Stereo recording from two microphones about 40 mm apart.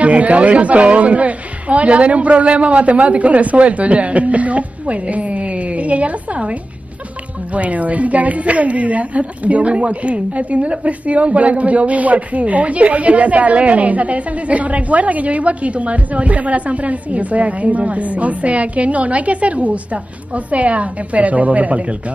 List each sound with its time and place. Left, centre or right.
0.0 s speech: right
7.5 s speech: right